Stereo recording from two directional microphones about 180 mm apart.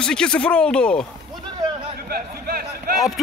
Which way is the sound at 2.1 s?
55° right (ahead or behind).